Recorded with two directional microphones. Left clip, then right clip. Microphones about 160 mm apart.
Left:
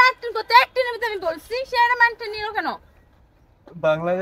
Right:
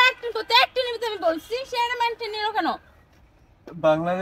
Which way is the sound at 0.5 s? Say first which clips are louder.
Left 4 dB; 20° left (ahead or behind).